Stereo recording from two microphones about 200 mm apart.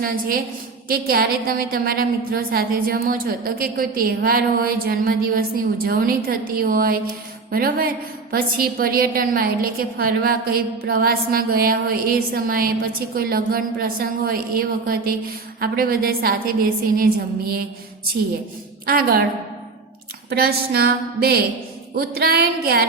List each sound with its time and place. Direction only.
0.0 s a woman's voice: 45° right (ahead or behind)
18.9 s a woman's voice: 50° right (ahead or behind)
20.3 s a woman's voice: 50° right (ahead or behind)